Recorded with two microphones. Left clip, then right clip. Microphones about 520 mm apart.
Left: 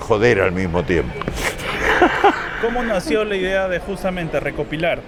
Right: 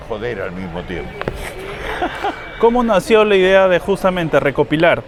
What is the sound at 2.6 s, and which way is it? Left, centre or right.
Speech, right.